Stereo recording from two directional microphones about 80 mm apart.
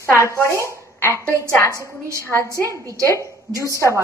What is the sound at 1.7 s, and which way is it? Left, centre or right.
Speech, right.